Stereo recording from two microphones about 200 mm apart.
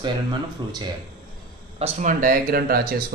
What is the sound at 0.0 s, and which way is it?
Speech, 20° right (ahead or behind).